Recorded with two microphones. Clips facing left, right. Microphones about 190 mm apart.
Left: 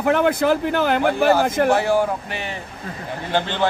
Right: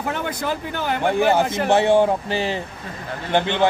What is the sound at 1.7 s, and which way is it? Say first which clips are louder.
A man's voice: right 2 dB; 25° right (ahead or behind).